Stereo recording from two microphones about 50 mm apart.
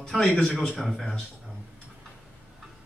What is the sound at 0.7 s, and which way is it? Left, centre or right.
Speech, centre.